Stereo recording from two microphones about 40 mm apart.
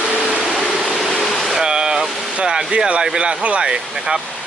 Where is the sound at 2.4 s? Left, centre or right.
Centre.